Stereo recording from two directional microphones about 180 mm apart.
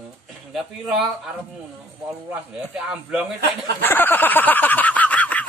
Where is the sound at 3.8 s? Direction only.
10° left (ahead or behind).